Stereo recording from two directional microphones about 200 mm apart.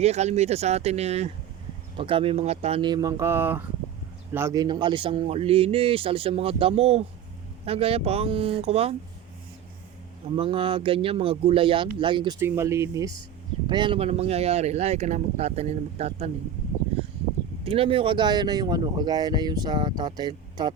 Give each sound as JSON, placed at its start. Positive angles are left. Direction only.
{"t": 0.0, "sound": "speech", "side_deg": -35}
{"t": 10.3, "sound": "speech", "side_deg": -25}
{"t": 12.4, "sound": "speech", "side_deg": -15}
{"t": 17.6, "sound": "speech", "side_deg": -25}